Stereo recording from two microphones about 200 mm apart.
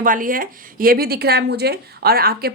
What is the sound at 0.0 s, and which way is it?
A woman's voice, 45° right (ahead or behind).